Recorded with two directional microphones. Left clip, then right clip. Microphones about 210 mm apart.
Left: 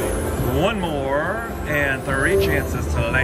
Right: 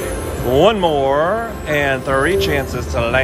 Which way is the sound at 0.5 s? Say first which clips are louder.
Right 11 dB; 10° right (ahead or behind).